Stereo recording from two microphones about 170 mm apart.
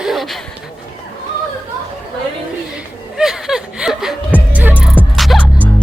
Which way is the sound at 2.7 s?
5° right (ahead or behind).